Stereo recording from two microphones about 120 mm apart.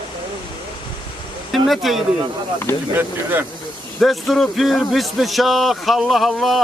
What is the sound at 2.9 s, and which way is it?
Speech, 20° right (ahead or behind).